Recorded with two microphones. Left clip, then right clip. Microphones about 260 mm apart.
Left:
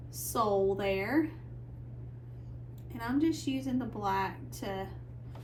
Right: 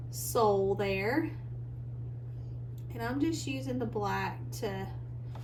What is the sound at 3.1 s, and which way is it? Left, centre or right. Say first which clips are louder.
A woman's voice: left 3 dB; centre.